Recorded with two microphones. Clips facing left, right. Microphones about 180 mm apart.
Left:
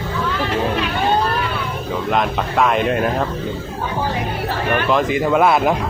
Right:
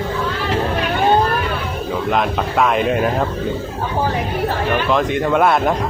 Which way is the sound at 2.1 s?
Centre (ahead or behind).